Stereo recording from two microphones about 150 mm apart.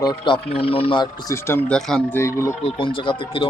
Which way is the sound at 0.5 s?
40° left (ahead or behind).